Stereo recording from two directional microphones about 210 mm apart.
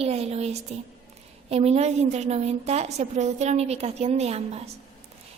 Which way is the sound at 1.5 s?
30° right (ahead or behind).